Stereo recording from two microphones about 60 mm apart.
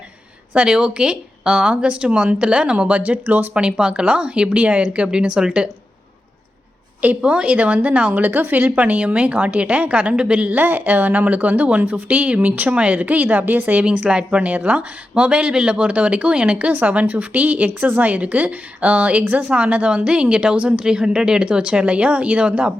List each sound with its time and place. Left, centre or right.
0.5 s speech: centre
3.5 s speech: centre
7.2 s speech: centre